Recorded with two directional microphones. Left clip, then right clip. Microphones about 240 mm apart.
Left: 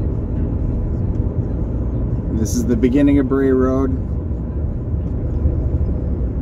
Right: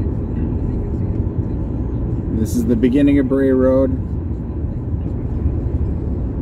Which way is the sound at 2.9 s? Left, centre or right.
Centre.